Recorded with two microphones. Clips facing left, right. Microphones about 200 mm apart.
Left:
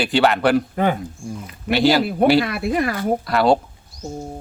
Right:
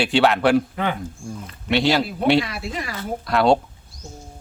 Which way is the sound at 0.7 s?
45° left (ahead or behind).